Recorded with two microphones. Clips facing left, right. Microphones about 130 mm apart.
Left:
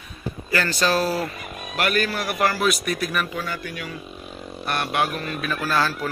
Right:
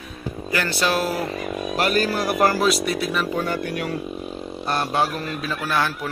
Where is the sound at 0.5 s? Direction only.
10° right (ahead or behind).